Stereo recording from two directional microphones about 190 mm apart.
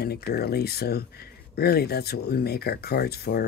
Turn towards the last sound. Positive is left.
turn(degrees=55)  # may be behind; listen again after turning